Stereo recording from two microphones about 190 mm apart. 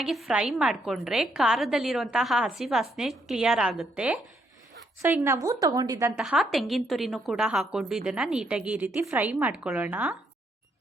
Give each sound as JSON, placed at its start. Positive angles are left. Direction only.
{"t": 0.0, "sound": "a woman's voice", "side_deg": -5}
{"t": 6.1, "sound": "a woman's voice", "side_deg": 0}